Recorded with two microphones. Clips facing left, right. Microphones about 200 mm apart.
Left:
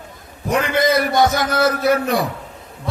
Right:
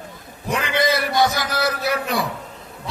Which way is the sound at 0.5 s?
50° left (ahead or behind).